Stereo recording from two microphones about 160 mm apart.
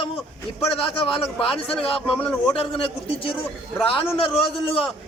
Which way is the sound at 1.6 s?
5° left (ahead or behind).